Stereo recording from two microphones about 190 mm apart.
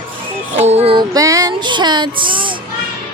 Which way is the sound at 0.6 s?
35° right (ahead or behind).